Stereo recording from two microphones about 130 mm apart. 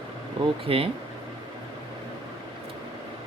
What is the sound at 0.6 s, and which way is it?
Speech, 45° right (ahead or behind).